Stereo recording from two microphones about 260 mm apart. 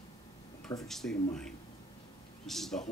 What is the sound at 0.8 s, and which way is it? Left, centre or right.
Speech, centre.